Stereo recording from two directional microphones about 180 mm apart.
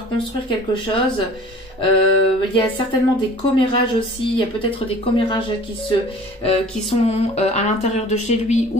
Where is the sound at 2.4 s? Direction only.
30° left (ahead or behind).